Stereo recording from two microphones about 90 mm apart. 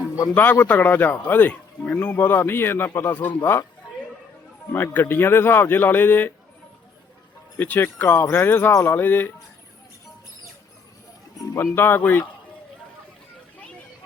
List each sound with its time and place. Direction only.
0.6 s a man's voice: 20° left (ahead or behind)
4.7 s a man's voice: 25° left (ahead or behind)
7.6 s a man's voice: 20° left (ahead or behind)
11.3 s a man's voice: 30° left (ahead or behind)